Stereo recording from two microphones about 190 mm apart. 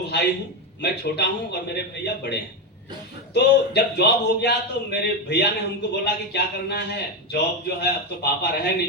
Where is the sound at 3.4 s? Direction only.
60° left (ahead or behind).